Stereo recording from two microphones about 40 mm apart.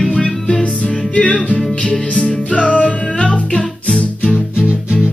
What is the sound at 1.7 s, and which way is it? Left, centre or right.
Music, centre.